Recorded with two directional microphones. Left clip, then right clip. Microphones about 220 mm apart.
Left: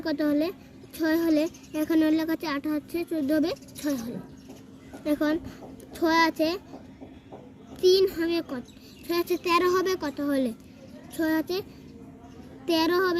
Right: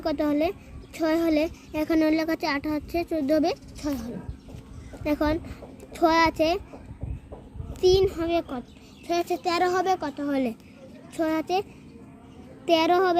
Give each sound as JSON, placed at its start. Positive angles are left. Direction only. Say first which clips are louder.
{"t": 0.0, "sound": "a woman's voice", "louder": "right 2 dB", "side_deg": -30}
{"t": 7.8, "sound": "a woman's voice", "louder": "even", "side_deg": -30}
{"t": 12.6, "sound": "a woman's voice", "louder": "right 3 dB", "side_deg": -30}